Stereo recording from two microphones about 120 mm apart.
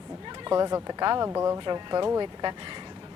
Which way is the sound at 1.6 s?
40° right (ahead or behind).